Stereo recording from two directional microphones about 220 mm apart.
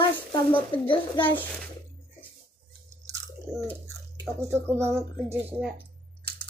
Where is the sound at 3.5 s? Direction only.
Centre (ahead or behind).